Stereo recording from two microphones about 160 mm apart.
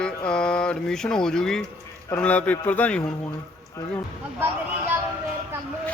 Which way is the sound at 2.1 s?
10° left (ahead or behind).